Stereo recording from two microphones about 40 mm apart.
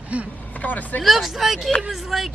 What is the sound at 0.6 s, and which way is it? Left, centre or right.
Speech, left.